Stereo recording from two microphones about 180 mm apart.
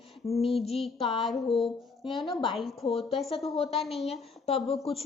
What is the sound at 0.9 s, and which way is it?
Speech, 30° left (ahead or behind).